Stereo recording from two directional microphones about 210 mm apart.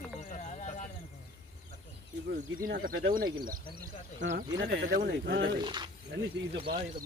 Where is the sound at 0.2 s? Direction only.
35° left (ahead or behind).